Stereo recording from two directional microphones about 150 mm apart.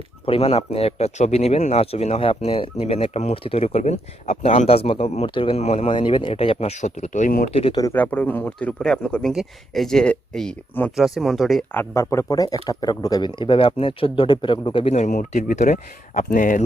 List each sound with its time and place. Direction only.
0.3 s speech: 40° left (ahead or behind); by 7.4 s 60° left (ahead or behind)
7.5 s speech: 40° left (ahead or behind)
7.9 s speech: 10° left (ahead or behind)
11.7 s speech: 15° left (ahead or behind); by 14.9 s 35° left (ahead or behind)
14.9 s speech: 55° left (ahead or behind)